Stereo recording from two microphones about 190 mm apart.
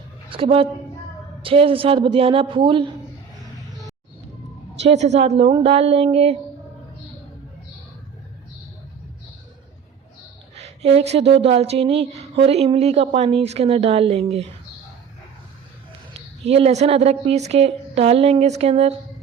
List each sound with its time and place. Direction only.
0.3 s a woman's voice: 30° right (ahead or behind)
4.8 s speech: 35° right (ahead or behind)
10.6 s speech: 35° right (ahead or behind)
16.5 s speech: 30° right (ahead or behind)